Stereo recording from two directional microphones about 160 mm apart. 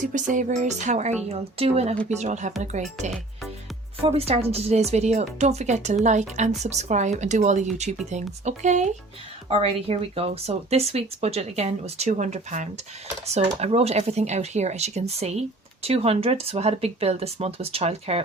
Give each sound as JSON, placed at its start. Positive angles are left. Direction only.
{"t": 0.0, "sound": "speech", "side_deg": -50}
{"t": 4.0, "sound": "speech", "side_deg": -40}